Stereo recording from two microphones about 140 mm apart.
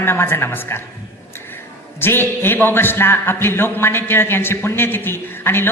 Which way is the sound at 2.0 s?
15° left (ahead or behind).